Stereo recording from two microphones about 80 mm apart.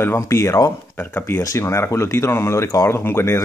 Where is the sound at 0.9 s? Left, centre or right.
Left.